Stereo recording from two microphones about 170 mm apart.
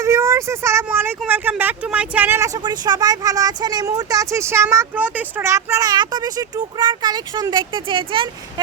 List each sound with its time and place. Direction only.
0.0 s speech: 15° right (ahead or behind)